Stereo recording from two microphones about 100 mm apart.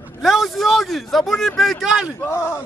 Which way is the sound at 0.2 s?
Centre (ahead or behind).